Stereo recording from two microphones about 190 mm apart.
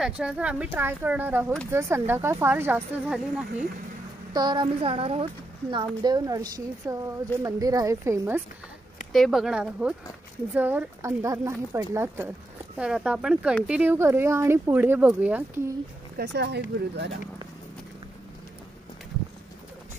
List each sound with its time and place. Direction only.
0.0 s speech: 5° right (ahead or behind)
4.3 s speech: 20° right (ahead or behind)
9.1 s speech: centre (ahead or behind)
16.2 s speech: 60° right (ahead or behind)